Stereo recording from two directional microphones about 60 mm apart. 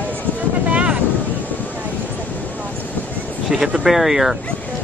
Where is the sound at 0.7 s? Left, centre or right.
Centre.